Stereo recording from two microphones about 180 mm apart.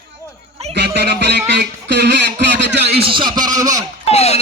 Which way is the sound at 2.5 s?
70° right (ahead or behind).